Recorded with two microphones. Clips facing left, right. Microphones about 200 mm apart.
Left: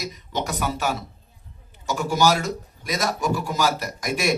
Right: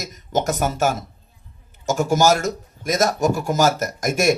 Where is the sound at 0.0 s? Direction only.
45° right (ahead or behind).